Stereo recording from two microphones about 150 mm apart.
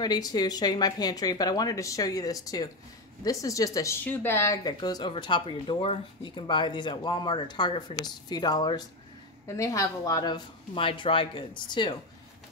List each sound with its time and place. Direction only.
0.0 s speech: 25° left (ahead or behind)